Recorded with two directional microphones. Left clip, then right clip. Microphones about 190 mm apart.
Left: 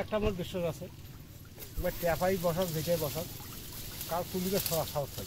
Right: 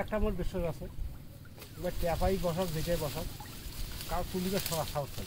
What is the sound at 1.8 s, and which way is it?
A man's voice, centre (ahead or behind).